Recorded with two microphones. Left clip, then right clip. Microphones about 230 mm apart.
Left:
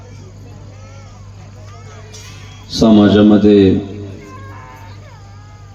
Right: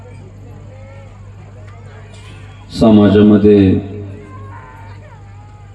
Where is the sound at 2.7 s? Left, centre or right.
Left.